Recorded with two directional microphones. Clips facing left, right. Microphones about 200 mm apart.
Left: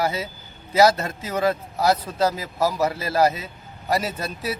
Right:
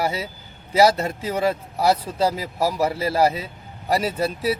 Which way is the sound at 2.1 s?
30° right (ahead or behind).